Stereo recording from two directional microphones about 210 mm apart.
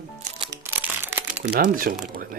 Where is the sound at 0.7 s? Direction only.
10° right (ahead or behind).